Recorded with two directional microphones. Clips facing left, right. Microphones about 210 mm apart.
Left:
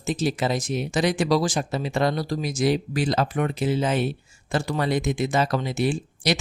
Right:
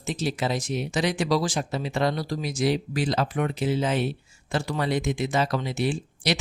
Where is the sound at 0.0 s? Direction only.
45° left (ahead or behind).